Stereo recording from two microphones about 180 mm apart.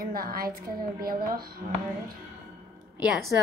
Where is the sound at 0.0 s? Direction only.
55° right (ahead or behind).